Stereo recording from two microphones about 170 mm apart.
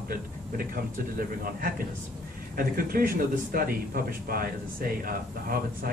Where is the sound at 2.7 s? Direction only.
55° right (ahead or behind).